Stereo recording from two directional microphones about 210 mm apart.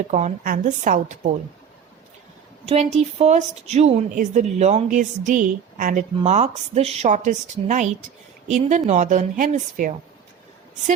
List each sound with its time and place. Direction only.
0.1 s a woman's voice: 35° right (ahead or behind)
2.6 s a woman's voice: 30° right (ahead or behind)